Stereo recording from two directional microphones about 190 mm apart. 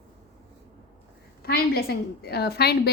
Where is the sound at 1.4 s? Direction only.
55° left (ahead or behind).